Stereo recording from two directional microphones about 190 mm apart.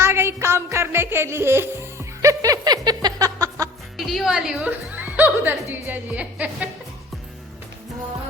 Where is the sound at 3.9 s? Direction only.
Centre (ahead or behind).